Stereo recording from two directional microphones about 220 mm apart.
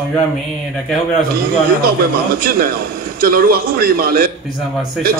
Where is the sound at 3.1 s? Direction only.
40° right (ahead or behind).